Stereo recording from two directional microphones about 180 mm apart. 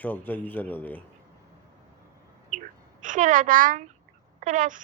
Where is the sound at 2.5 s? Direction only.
45° right (ahead or behind).